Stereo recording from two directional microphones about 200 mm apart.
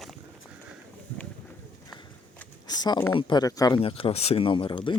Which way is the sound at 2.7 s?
20° left (ahead or behind).